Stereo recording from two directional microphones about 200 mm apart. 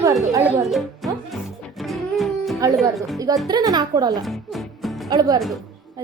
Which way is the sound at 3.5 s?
20° right (ahead or behind).